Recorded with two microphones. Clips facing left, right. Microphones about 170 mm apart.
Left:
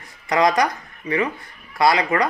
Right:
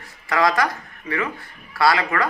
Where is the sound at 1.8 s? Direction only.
20° left (ahead or behind).